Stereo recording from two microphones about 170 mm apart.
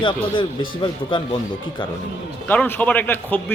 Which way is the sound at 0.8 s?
30° left (ahead or behind).